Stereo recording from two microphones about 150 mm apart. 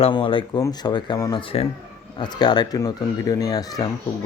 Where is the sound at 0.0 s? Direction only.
35° left (ahead or behind).